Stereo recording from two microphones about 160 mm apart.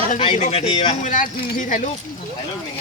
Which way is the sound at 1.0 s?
55° left (ahead or behind).